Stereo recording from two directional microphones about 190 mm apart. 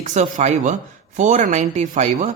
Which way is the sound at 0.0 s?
40° right (ahead or behind).